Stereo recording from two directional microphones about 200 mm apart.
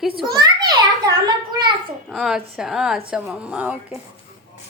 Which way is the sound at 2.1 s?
Centre (ahead or behind).